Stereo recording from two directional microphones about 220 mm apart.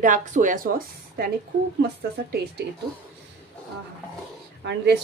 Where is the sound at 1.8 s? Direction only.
45° right (ahead or behind).